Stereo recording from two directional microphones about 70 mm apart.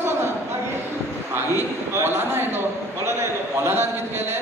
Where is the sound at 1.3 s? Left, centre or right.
Right.